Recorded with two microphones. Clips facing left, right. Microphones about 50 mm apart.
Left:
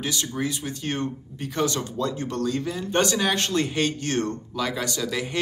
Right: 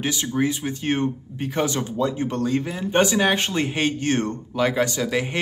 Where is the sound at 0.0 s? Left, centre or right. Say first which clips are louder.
Right 5 dB; centre.